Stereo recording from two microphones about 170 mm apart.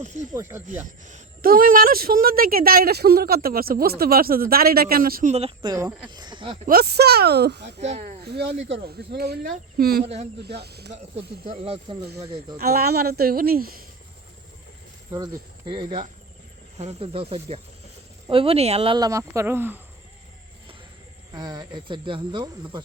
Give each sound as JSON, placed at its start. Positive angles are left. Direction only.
{"t": 0.0, "sound": "speech", "side_deg": -45}
{"t": 0.3, "sound": "speech", "side_deg": -15}
{"t": 1.0, "sound": "a woman's voice", "side_deg": -55}
{"t": 5.3, "sound": "speech", "side_deg": -35}
{"t": 6.7, "sound": "speech", "side_deg": -65}
{"t": 7.8, "sound": "speech", "side_deg": -40}
{"t": 8.2, "sound": "speech", "side_deg": -70}
{"t": 9.1, "sound": "speech", "side_deg": -65}
{"t": 11.5, "sound": "speech", "side_deg": -35}
{"t": 12.1, "sound": "speech", "side_deg": -20}
{"t": 12.5, "sound": "a woman's voice", "side_deg": -65}
{"t": 15.1, "sound": "speech", "side_deg": -20}
{"t": 16.7, "sound": "speech", "side_deg": -35}
{"t": 21.3, "sound": "speech", "side_deg": -25}